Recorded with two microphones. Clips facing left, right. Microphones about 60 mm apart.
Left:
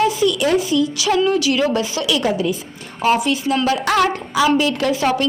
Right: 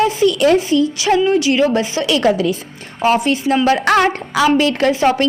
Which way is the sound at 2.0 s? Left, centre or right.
Right.